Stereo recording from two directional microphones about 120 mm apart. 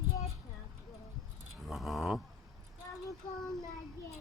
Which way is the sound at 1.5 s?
Centre (ahead or behind).